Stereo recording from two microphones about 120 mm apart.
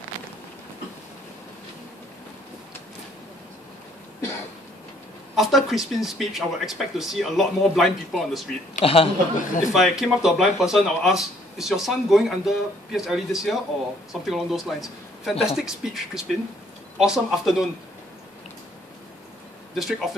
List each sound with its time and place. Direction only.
5.3 s speech: centre (ahead or behind)
8.8 s speech: 55° left (ahead or behind)
9.4 s speech: 90° left
9.7 s speech: centre (ahead or behind)
19.7 s speech: centre (ahead or behind)